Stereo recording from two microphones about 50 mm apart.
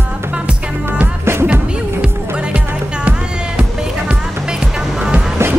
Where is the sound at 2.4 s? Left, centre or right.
Right.